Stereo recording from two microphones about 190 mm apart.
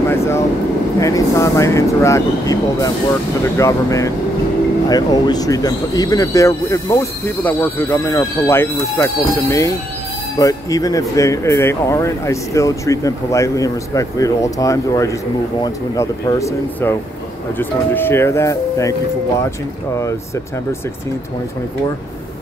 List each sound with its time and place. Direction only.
0.9 s speech: 15° left (ahead or behind)